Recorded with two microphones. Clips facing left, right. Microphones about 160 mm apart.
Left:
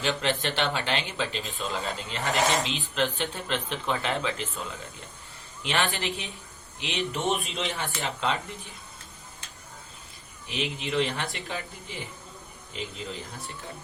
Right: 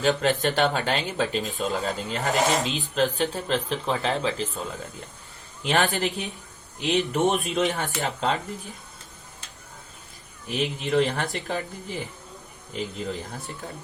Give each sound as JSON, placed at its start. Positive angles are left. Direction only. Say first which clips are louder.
{"t": 0.0, "sound": "speech", "louder": "right 5 dB", "side_deg": -40}
{"t": 10.5, "sound": "speech", "louder": "right 5 dB", "side_deg": -45}
{"t": 12.7, "sound": "speech", "louder": "right 6 dB", "side_deg": -45}